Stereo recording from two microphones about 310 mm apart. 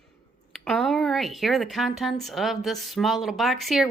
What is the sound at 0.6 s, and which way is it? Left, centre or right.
A woman's voice, centre.